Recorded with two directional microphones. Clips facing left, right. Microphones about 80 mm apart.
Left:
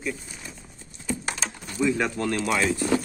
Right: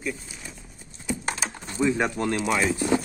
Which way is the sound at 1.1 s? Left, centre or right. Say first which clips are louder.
Even; centre.